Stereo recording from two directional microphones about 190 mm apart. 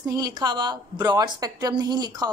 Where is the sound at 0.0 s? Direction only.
20° right (ahead or behind).